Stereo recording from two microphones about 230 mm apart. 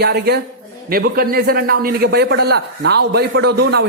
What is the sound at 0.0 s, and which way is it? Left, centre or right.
A man's voice, right.